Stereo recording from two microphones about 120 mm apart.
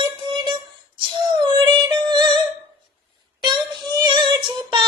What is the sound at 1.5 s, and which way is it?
Music, 35° right (ahead or behind).